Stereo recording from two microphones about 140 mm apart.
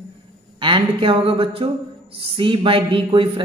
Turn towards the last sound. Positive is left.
turn(degrees=-35)  # may be behind; listen again after turning